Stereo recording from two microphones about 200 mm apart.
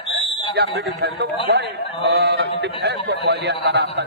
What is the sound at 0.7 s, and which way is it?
A man's voice, 60° right (ahead or behind).